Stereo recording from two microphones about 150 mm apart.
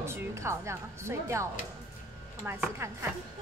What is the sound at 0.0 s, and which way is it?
A woman's voice, 15° right (ahead or behind).